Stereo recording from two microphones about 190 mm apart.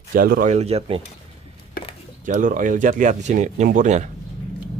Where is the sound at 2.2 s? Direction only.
45° right (ahead or behind).